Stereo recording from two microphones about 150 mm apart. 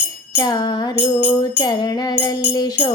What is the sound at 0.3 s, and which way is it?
Music, 25° left (ahead or behind).